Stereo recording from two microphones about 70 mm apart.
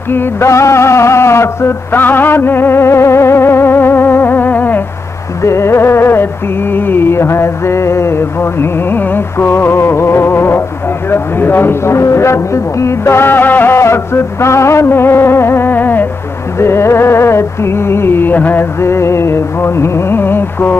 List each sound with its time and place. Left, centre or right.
0.1 s a sound: left
5.4 s speech: left
16.5 s speech: left